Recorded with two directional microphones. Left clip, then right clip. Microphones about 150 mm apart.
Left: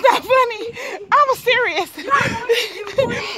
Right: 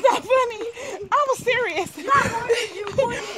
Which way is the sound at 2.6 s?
45° left (ahead or behind).